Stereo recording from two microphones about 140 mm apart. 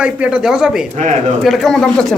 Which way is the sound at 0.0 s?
5° right (ahead or behind).